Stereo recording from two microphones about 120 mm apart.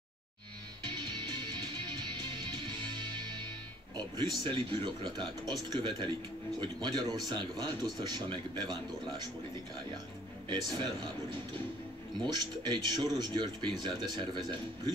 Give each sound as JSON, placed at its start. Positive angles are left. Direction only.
{"t": 0.8, "sound": "music", "side_deg": -40}
{"t": 3.9, "sound": "a man's voice", "side_deg": -35}
{"t": 10.5, "sound": "a man's voice", "side_deg": -40}